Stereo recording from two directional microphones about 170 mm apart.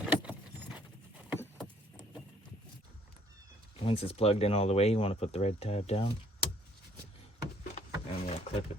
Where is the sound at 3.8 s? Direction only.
35° left (ahead or behind).